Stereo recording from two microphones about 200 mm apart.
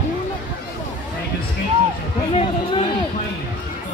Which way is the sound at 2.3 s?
30° left (ahead or behind).